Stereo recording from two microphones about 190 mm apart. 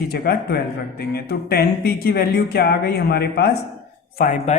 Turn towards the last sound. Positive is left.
turn(degrees=45)  # may be behind; listen again after turning